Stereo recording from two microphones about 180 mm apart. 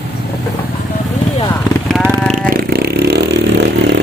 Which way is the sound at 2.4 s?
55° right (ahead or behind).